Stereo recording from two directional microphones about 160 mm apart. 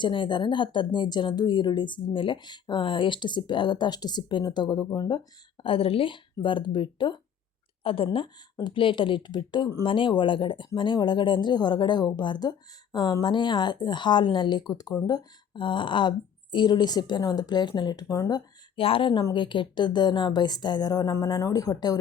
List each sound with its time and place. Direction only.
0.0 s speech: 30° left (ahead or behind)